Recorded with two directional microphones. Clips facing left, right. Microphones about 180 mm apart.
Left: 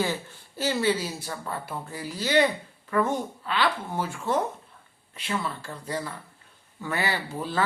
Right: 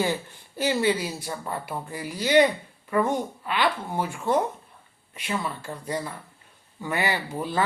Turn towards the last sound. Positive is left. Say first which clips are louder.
# right 2 dB
turn(degrees=-15)  # may be behind; listen again after turning